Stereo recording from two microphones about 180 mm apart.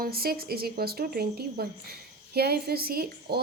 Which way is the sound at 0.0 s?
55° right (ahead or behind).